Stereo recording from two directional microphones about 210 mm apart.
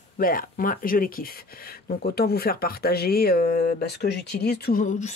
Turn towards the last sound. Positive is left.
turn(degrees=35)  # may be behind; listen again after turning